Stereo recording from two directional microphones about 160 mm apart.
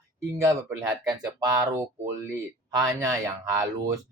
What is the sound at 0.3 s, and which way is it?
Speech, 20° right (ahead or behind).